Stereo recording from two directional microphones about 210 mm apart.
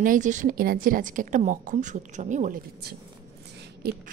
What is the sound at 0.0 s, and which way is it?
A woman's voice, 40° right (ahead or behind).